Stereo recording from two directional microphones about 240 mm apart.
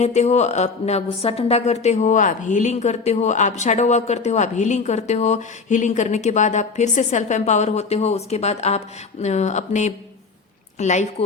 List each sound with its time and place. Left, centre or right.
0.0 s a woman's voice: left